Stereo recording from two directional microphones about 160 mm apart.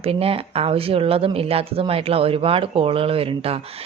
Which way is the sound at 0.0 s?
40° right (ahead or behind).